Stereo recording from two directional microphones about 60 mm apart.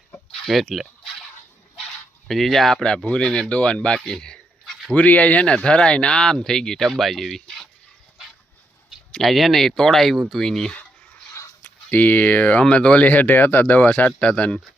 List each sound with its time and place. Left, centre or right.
0.3 s speech: centre
2.2 s speech: centre
2.8 s speech: centre
3.5 s a sound: centre
4.9 s speech: left; by 7.7 s centre
9.2 s speech: centre
11.6 s speech: left